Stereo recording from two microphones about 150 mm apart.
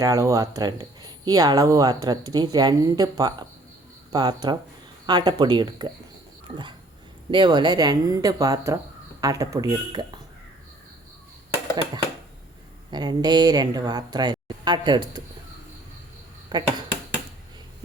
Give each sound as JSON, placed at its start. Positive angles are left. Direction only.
{"t": 0.0, "sound": "speech", "side_deg": -20}
{"t": 7.3, "sound": "speech", "side_deg": -30}
{"t": 12.9, "sound": "speech", "side_deg": -30}
{"t": 16.5, "sound": "speech", "side_deg": -30}